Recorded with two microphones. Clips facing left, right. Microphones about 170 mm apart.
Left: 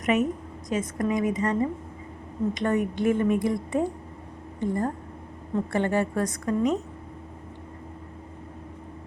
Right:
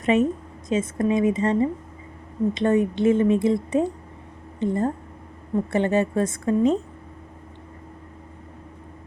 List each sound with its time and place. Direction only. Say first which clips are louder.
0.0 s a woman's voice: right 4 dB; 30° right (ahead or behind)